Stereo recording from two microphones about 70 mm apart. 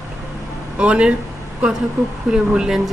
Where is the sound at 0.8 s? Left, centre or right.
Centre.